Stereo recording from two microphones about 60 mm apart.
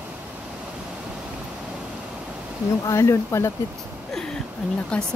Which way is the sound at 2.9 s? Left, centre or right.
Left.